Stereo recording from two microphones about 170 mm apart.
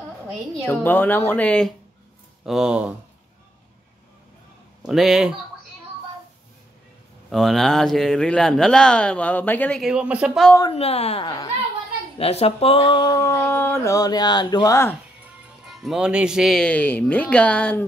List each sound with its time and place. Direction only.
0.7 s speech: 10° left (ahead or behind)
2.4 s speech: 5° right (ahead or behind)
4.8 s speech: centre (ahead or behind)
7.2 s speech: centre (ahead or behind)
9.8 s speech: 5° right (ahead or behind)
10.6 s a woman's voice: 35° left (ahead or behind); by 15.0 s 20° left (ahead or behind)
15.6 s speech: centre (ahead or behind)